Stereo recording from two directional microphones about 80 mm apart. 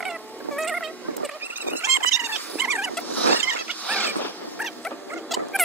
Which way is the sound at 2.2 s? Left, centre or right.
Right.